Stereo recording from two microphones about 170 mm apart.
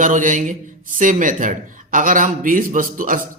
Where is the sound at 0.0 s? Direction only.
50° right (ahead or behind).